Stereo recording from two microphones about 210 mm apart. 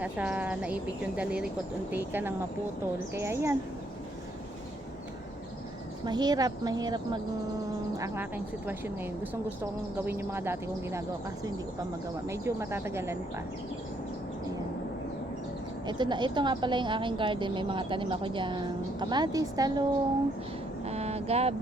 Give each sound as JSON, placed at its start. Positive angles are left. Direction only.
{"t": 0.0, "sound": "speech", "side_deg": -5}
{"t": 6.1, "sound": "a woman's voice", "side_deg": -20}
{"t": 12.3, "sound": "speech", "side_deg": -15}
{"t": 15.9, "sound": "a woman's voice", "side_deg": -20}
{"t": 20.8, "sound": "a sound", "side_deg": -30}